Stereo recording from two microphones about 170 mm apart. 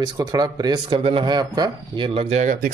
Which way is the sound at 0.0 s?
25° right (ahead or behind).